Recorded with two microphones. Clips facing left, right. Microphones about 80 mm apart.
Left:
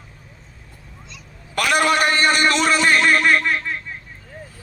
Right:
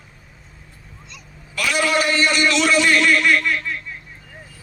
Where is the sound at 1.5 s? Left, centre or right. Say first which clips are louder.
Left 2 dB; left.